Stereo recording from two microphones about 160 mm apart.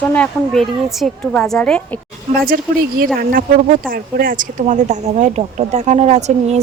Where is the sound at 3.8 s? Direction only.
60° right (ahead or behind); by 6.6 s 45° right (ahead or behind).